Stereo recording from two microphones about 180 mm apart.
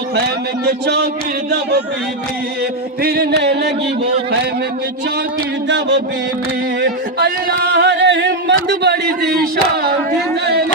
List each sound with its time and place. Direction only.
0.6 s music: 60° right (ahead or behind)
3.0 s music: 60° right (ahead or behind)
5.6 s a sound: 80° right
6.8 s speech: 65° right (ahead or behind)